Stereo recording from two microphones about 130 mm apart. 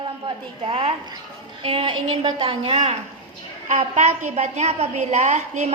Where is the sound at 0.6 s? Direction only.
45° right (ahead or behind).